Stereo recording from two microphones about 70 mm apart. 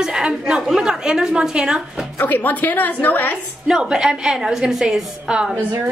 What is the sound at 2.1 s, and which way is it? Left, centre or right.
A woman's voice, left.